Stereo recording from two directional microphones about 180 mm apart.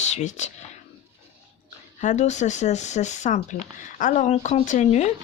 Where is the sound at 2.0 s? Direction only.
40° left (ahead or behind).